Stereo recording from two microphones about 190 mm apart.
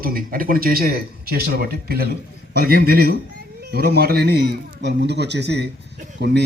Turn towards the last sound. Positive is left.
turn(degrees=-65)  # may be behind; listen again after turning